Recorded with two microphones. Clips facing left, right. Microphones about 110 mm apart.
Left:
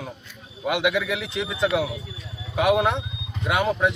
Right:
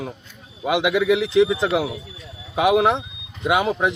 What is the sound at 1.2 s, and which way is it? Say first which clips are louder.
Speech: right 13 dB; 90° right.